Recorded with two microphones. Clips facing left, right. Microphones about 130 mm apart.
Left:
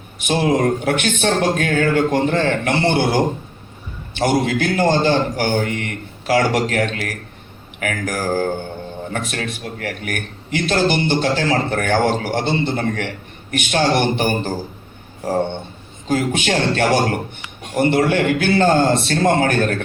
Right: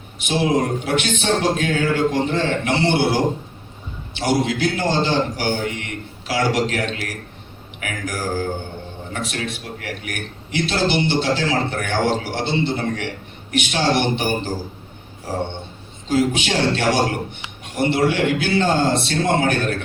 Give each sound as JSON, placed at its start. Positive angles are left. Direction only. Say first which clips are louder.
{"t": 0.2, "sound": "a man's voice", "louder": "left 2 dB", "side_deg": 50}
{"t": 16.0, "sound": "a man's voice", "louder": "even", "side_deg": 50}